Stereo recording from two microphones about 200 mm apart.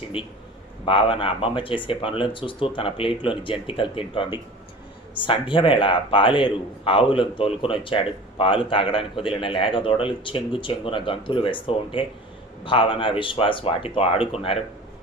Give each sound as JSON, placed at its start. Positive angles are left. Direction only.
{"t": 0.1, "sound": "a man's voice", "side_deg": 25}